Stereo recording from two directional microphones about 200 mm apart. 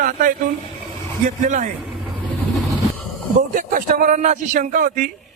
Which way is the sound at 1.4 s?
40° right (ahead or behind).